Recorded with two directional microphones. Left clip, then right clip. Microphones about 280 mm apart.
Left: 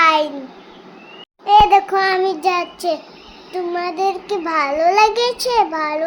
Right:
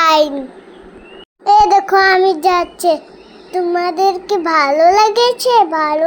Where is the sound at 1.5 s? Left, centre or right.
Right.